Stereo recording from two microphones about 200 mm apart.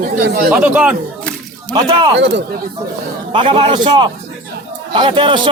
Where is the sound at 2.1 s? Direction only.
60° right (ahead or behind).